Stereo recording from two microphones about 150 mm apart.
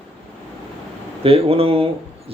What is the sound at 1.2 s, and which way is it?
Speech, 40° right (ahead or behind).